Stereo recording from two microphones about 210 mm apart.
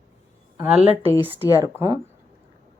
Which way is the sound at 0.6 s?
5° right (ahead or behind).